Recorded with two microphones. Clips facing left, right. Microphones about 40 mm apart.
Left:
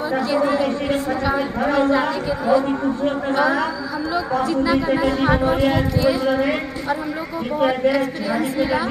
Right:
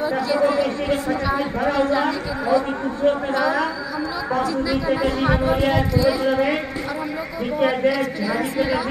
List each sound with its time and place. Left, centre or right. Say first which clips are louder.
0.3 s a man's voice: even; centre
4.5 s a man's voice: left 3 dB; left; by 6.5 s centre